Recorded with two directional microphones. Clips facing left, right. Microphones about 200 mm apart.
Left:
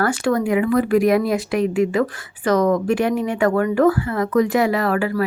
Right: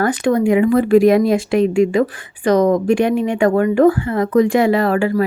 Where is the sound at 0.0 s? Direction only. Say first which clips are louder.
Right 4 dB; 20° right (ahead or behind).